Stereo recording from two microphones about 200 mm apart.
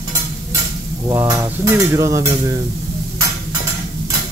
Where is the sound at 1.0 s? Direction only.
20° right (ahead or behind).